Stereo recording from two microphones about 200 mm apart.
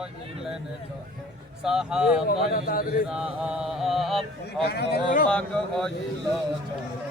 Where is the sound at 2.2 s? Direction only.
45° left (ahead or behind).